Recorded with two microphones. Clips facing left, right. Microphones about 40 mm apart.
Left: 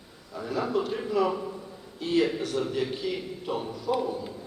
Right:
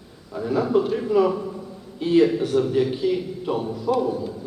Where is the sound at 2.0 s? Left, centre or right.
Right.